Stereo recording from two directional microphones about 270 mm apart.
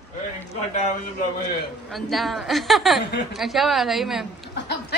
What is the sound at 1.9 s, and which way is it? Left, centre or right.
A woman's voice, centre.